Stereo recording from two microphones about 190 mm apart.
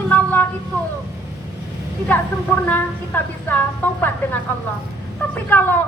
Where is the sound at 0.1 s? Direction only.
10° left (ahead or behind).